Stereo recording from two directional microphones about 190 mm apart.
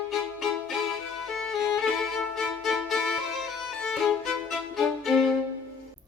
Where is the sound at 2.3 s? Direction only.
Centre (ahead or behind).